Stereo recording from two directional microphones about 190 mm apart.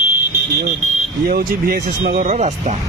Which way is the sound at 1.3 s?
50° right (ahead or behind).